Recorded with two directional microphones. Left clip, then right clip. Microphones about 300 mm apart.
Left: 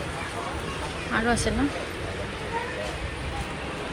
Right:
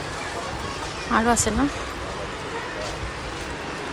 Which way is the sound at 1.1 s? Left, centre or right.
Centre.